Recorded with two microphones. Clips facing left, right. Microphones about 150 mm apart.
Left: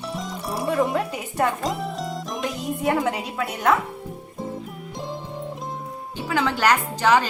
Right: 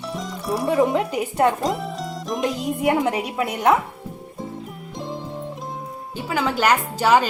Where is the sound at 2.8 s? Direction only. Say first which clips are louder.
Right 2 dB; 20° right (ahead or behind).